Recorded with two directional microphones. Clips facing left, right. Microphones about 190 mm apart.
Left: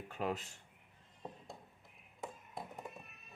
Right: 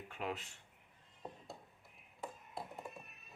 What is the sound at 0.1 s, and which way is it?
Speech, 40° left (ahead or behind).